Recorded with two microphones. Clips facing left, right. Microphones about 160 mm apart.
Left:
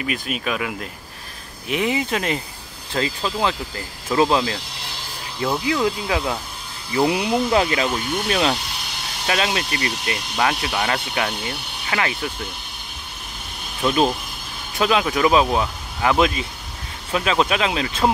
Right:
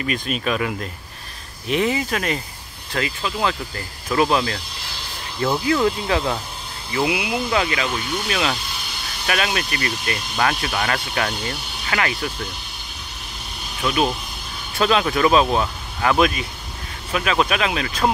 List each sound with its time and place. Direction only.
0.0 s speech: 10° left (ahead or behind); by 3.3 s 30° left (ahead or behind)
3.3 s speech: 20° left (ahead or behind)
5.4 s speech: 10° left (ahead or behind)
6.9 s speech: 40° left (ahead or behind); by 12.2 s 20° left (ahead or behind)
14.8 s speech: 15° left (ahead or behind)